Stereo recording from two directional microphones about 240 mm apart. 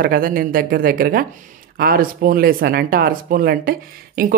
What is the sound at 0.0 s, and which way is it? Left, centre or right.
A woman's voice, right.